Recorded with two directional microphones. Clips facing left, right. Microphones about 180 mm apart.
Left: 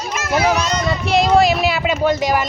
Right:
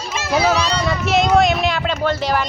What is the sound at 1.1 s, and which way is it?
Speech, centre (ahead or behind).